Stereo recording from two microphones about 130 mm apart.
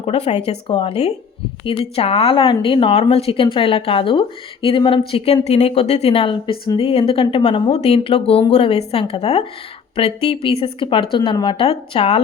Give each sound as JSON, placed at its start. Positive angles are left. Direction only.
{"t": 0.0, "sound": "speech", "side_deg": 55}